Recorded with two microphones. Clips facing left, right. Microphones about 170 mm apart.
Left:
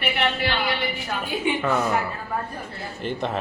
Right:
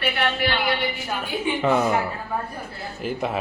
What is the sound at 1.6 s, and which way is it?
Speech, 15° right (ahead or behind).